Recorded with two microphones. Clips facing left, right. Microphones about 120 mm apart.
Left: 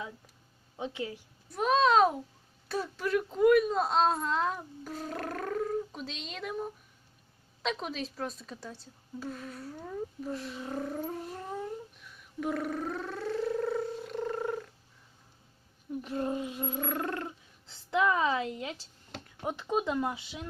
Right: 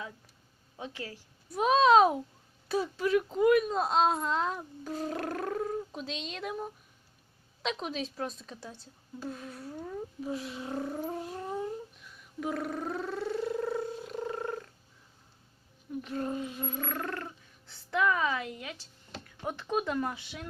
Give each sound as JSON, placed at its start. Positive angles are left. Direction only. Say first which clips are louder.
{"t": 0.8, "sound": "speech", "louder": "left 5 dB", "side_deg": 20}
{"t": 1.5, "sound": "speech", "louder": "right 2 dB", "side_deg": -5}
{"t": 7.6, "sound": "speech", "louder": "even", "side_deg": 0}
{"t": 12.4, "sound": "a sound", "louder": "left 1 dB", "side_deg": 0}
{"t": 16.0, "sound": "speech", "louder": "left 1 dB", "side_deg": 15}